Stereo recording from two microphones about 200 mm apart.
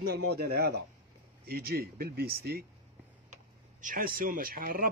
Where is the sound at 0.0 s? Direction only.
55° right (ahead or behind).